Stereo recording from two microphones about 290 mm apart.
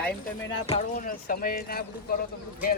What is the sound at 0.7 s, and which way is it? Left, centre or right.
Speech, left.